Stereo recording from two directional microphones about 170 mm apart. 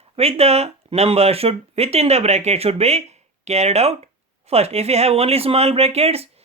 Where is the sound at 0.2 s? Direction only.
35° right (ahead or behind).